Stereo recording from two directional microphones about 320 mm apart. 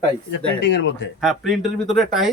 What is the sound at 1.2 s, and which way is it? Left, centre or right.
Speech, centre.